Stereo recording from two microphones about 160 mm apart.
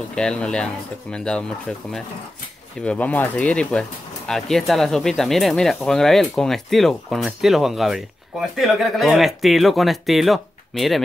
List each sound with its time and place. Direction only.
0.1 s speech: 5° left (ahead or behind)
2.8 s speech: 10° left (ahead or behind)